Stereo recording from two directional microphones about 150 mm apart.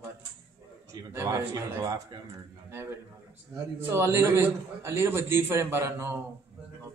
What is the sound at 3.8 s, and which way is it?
A man's voice, 15° right (ahead or behind).